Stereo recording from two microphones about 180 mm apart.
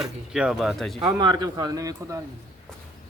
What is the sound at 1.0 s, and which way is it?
Speech, 25° right (ahead or behind).